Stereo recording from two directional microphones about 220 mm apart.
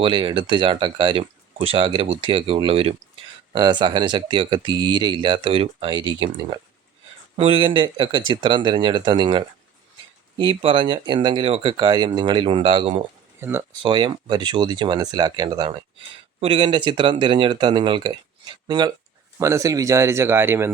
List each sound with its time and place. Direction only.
0.0 s speech: 20° right (ahead or behind)
7.3 s speech: 25° right (ahead or behind)
13.4 s speech: 10° right (ahead or behind)